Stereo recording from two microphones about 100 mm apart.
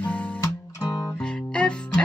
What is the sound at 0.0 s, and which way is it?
Music, 10° left (ahead or behind).